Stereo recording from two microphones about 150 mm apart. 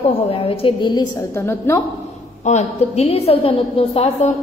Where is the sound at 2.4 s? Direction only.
50° left (ahead or behind).